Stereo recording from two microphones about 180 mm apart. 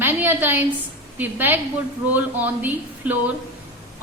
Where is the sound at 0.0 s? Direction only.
10° right (ahead or behind).